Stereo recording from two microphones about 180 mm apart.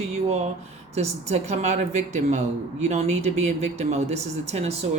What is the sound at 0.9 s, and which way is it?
Speech, 35° right (ahead or behind).